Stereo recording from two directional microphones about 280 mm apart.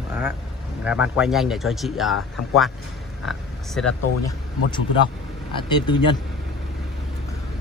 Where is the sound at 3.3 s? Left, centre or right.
Centre.